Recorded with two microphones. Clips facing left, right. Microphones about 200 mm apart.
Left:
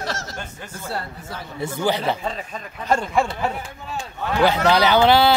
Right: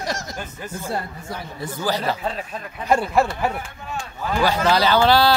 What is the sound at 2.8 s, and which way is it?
Speech, 10° right (ahead or behind).